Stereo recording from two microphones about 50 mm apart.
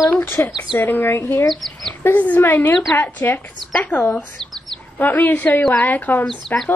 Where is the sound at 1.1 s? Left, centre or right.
Left.